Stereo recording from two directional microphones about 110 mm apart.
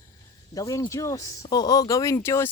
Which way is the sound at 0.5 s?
30° left (ahead or behind).